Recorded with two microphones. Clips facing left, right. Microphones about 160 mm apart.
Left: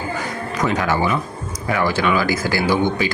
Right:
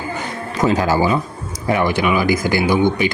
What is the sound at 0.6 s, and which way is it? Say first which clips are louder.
A man's voice: right 4 dB; 30° right (ahead or behind).